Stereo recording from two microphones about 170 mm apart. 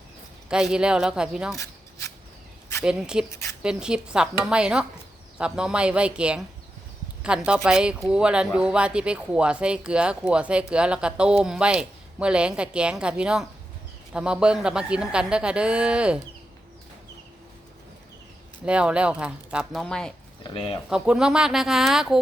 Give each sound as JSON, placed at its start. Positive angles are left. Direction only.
{"t": 0.5, "sound": "speech", "side_deg": -5}
{"t": 1.5, "sound": "rub", "side_deg": 20}
{"t": 2.8, "sound": "speech", "side_deg": -5}
{"t": 18.6, "sound": "speech", "side_deg": -5}
{"t": 20.4, "sound": "speech", "side_deg": 30}
{"t": 20.9, "sound": "speech", "side_deg": -5}